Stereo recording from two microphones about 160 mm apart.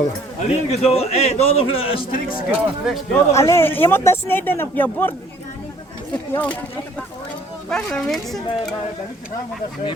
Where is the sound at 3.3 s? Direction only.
15° left (ahead or behind).